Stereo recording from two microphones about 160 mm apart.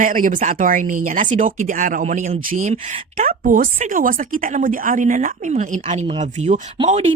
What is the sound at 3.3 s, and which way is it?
Speech, 60° right (ahead or behind).